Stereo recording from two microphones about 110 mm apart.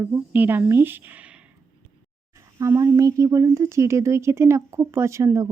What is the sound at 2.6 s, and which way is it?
Speech, 25° right (ahead or behind).